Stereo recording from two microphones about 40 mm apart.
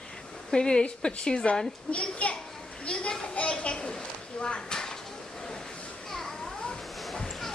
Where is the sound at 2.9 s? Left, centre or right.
Left.